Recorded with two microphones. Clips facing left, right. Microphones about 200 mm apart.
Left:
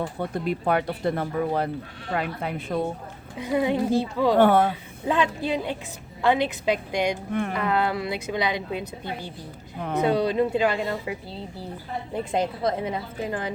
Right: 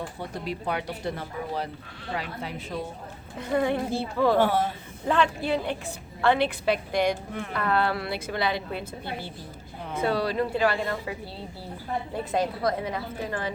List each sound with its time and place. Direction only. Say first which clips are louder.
0.2 s speech: left 6 dB; 50° left (ahead or behind)
3.3 s a woman's voice: left 2 dB; 15° left (ahead or behind)
4.4 s speech: left 5 dB; 55° left (ahead or behind)
5.0 s a woman's voice: even; 15° left (ahead or behind)
10.0 s a woman's voice: left 4 dB; 20° left (ahead or behind)
12.3 s a woman's voice: left 1 dB; 25° left (ahead or behind)